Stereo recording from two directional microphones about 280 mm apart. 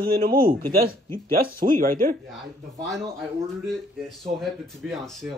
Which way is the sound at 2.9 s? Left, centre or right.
Centre.